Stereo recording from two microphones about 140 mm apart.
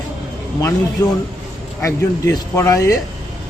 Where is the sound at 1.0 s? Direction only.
30° left (ahead or behind).